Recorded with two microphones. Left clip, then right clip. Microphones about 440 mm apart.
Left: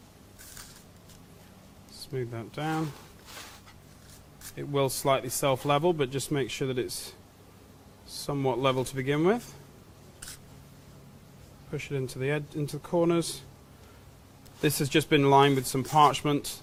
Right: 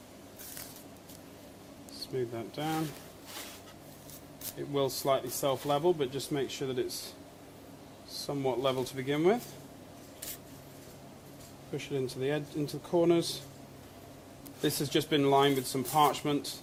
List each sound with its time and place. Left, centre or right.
2.0 s speech: left
4.7 s speech: left
8.1 s speech: left
11.7 s speech: left
14.6 s speech: left